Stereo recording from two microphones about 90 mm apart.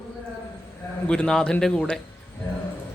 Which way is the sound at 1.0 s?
10° left (ahead or behind).